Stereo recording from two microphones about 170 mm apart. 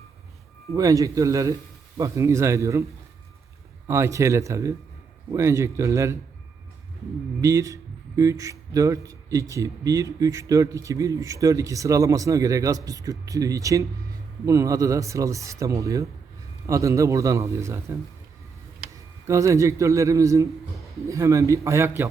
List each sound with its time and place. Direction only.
0.7 s a man's voice: 20° right (ahead or behind)
3.8 s a man's voice: 15° right (ahead or behind)
7.4 s a man's voice: 20° right (ahead or behind)
19.3 s a man's voice: 15° right (ahead or behind)